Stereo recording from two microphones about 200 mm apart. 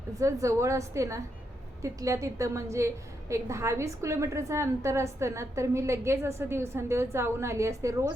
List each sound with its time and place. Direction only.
0.2 s a woman's voice: 15° right (ahead or behind)